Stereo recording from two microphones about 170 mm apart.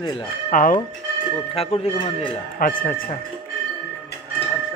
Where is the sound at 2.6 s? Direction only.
55° left (ahead or behind).